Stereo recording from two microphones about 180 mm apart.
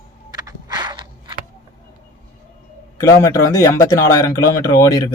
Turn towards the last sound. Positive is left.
turn(degrees=20)  # may be behind; listen again after turning